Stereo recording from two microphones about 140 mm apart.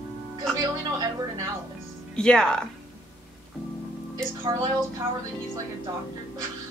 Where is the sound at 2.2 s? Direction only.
5° left (ahead or behind).